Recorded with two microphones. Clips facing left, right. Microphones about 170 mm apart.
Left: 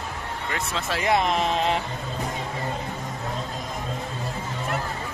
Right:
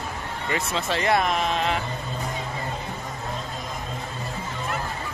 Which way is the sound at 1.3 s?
30° left (ahead or behind).